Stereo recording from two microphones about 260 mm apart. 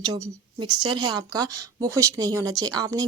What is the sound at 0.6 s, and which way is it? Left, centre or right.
Speech, centre.